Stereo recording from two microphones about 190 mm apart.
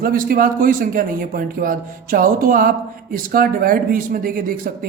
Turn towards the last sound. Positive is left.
turn(degrees=-45)  # may be behind; listen again after turning